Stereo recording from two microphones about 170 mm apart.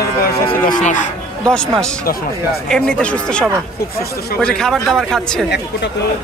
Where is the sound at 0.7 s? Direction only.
50° left (ahead or behind).